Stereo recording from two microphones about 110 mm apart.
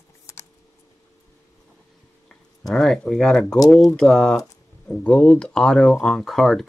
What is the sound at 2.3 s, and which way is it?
Speech, 5° left (ahead or behind).